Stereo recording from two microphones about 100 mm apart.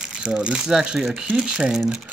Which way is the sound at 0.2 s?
10° right (ahead or behind).